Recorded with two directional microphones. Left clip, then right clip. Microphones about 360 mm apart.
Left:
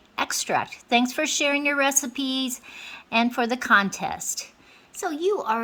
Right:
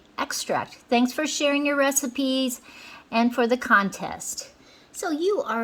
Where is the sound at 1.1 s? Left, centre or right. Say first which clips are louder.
Even; left.